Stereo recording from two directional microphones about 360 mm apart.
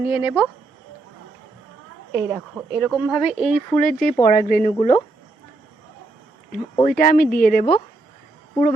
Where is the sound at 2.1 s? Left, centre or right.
Centre.